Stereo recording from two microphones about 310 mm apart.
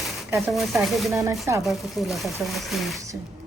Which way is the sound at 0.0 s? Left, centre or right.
Centre.